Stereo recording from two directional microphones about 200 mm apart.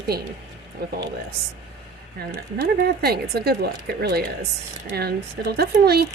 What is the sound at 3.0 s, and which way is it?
Speech, 50° right (ahead or behind).